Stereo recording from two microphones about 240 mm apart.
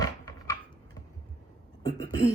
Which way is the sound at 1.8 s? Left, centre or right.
Centre.